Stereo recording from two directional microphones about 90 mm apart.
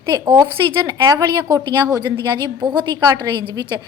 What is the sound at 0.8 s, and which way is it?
A woman's voice, 40° right (ahead or behind).